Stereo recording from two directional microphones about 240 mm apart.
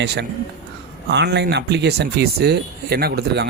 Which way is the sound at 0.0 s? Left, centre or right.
Right.